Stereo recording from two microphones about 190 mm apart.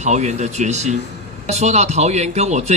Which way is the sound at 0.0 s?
35° right (ahead or behind).